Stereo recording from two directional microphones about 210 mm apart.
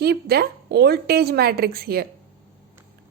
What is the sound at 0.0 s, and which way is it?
A woman's voice, 50° right (ahead or behind).